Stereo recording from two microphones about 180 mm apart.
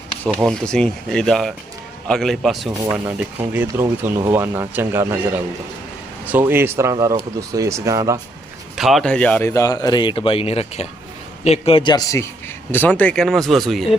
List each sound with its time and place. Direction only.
0.4 s speech: 5° left (ahead or behind); by 5.0 s 10° right (ahead or behind)
6.2 s speech: 10° right (ahead or behind)
8.7 s speech: centre (ahead or behind)